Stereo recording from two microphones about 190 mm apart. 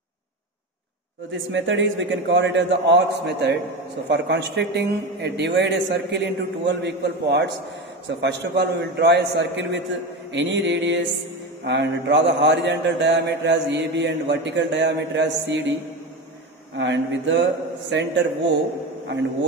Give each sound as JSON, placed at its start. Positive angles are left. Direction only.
{"t": 1.3, "sound": "a man's voice", "side_deg": -75}
{"t": 16.7, "sound": "a man's voice", "side_deg": -70}